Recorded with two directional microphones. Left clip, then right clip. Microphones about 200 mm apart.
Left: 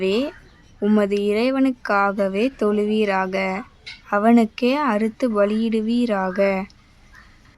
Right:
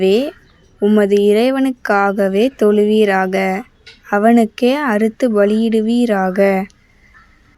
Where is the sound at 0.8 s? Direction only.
10° right (ahead or behind).